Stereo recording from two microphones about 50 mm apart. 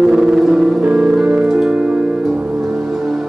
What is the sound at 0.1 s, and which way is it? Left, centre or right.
Music, centre.